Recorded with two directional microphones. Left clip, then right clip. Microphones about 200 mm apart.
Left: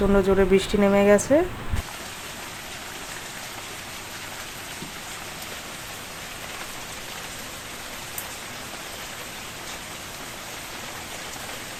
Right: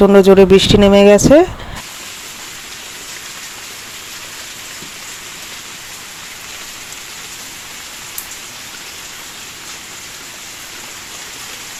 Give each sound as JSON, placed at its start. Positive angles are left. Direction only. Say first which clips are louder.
{"t": 0.0, "sound": "speech", "louder": "right 13 dB", "side_deg": -40}